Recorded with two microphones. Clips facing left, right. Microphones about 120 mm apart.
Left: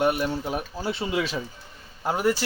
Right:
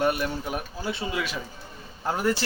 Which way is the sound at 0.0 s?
20° left (ahead or behind).